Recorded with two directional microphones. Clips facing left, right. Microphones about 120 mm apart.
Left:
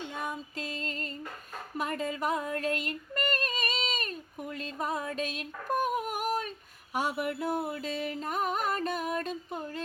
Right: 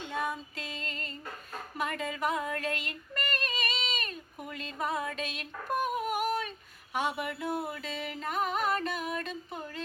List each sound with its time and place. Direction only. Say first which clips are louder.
0.5 s music: left 4 dB; 35° left (ahead or behind)
1.8 s yodeling: left 1 dB; 35° left (ahead or behind)
4.5 s a sound: even; 35° left (ahead or behind)
6.9 s music: left 1 dB; 40° left (ahead or behind)